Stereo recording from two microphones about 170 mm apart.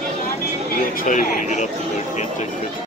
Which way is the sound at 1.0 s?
50° left (ahead or behind).